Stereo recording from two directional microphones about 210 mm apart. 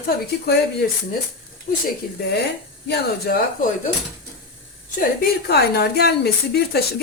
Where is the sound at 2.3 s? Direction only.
50° left (ahead or behind).